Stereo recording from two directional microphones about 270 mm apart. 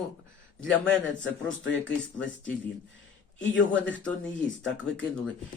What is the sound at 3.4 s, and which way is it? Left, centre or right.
Speech, left.